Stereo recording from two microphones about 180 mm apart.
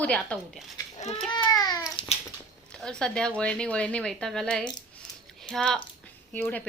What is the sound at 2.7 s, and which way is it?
Speech, 5° left (ahead or behind).